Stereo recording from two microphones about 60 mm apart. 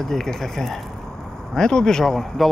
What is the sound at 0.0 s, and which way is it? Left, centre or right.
Speech, centre.